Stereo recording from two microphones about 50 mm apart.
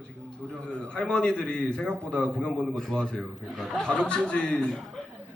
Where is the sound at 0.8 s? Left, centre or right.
Centre.